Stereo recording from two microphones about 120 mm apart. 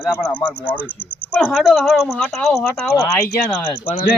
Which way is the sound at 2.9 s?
25° left (ahead or behind).